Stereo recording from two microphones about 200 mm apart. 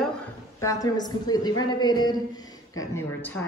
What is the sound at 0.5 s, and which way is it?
A woman's voice, 15° left (ahead or behind).